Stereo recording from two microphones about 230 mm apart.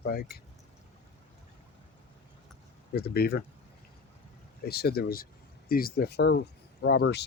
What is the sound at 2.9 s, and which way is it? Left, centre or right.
Speech, left.